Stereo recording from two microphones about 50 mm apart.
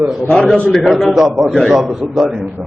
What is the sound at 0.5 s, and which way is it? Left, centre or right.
Speech, centre.